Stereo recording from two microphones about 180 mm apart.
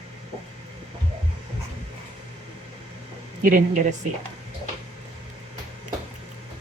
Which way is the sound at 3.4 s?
45° right (ahead or behind).